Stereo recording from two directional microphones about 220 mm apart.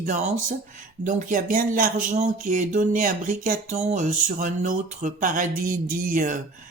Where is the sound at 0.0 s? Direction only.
35° right (ahead or behind).